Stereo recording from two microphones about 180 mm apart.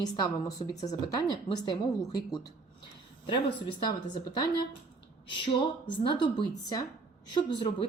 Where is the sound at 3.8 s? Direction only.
25° left (ahead or behind).